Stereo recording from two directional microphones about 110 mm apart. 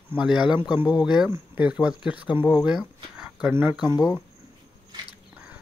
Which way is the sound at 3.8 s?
35° left (ahead or behind).